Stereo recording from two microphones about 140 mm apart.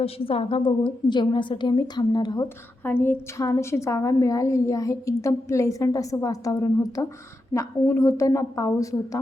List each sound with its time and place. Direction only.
0.0 s a woman's voice: 45° left (ahead or behind)
2.8 s a woman's voice: 15° left (ahead or behind)